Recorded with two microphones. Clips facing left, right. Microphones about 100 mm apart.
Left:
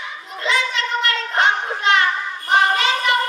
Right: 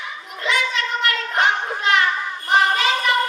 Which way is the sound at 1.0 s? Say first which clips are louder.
Left 1 dB; 30° left (ahead or behind).